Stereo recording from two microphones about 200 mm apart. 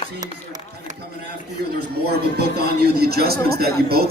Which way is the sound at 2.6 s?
50° right (ahead or behind).